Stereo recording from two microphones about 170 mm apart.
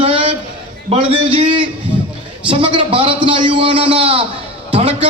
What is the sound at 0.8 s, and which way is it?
A man's voice, 35° right (ahead or behind).